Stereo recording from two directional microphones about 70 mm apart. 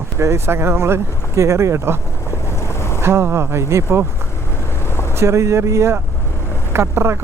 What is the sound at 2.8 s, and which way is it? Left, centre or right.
Boat, left.